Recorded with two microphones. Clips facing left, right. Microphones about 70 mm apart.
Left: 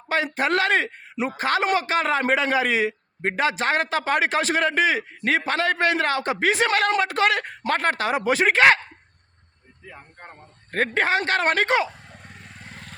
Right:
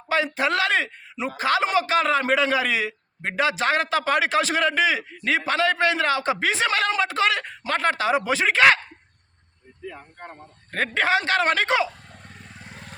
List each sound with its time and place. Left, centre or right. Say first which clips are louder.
0.1 s a man's voice: even; left
10.7 s a man's voice: even; left
12.5 s vehicle: even; centre